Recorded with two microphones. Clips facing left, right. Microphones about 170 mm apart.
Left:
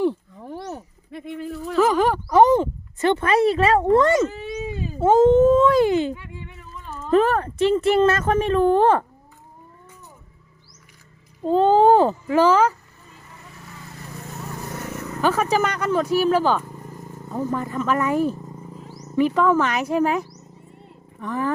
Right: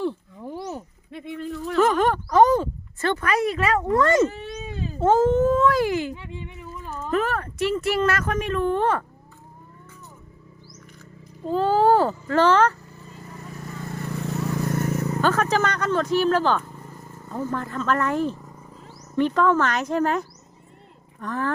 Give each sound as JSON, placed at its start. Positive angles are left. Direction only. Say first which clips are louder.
{"t": 0.0, "sound": "a sound", "louder": "left 5 dB", "side_deg": 15}
{"t": 1.1, "sound": "speech", "louder": "left 1 dB", "side_deg": 0}
{"t": 4.1, "sound": "speech", "louder": "even", "side_deg": 0}
{"t": 6.1, "sound": "a sound", "louder": "right 2 dB", "side_deg": -25}
{"t": 7.1, "sound": "speech", "louder": "left 7 dB", "side_deg": 30}
{"t": 11.4, "sound": "a child's voice", "louder": "left 4 dB", "side_deg": 25}
{"t": 15.2, "sound": "speech", "louder": "left 3 dB", "side_deg": 10}